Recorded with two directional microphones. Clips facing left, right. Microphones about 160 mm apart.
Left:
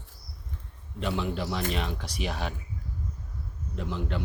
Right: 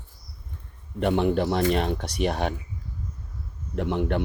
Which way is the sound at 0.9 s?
60° right (ahead or behind).